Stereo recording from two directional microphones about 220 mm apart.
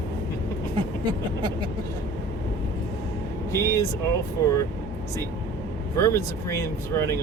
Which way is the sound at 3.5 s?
15° left (ahead or behind).